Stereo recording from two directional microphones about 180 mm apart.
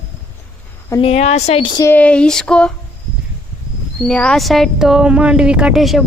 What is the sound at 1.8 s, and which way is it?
Speech, 10° left (ahead or behind).